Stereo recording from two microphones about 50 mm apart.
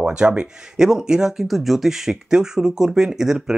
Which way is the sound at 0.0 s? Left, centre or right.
Right.